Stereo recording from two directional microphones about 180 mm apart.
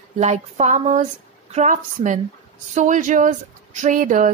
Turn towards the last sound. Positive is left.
turn(degrees=-45)  # may be behind; listen again after turning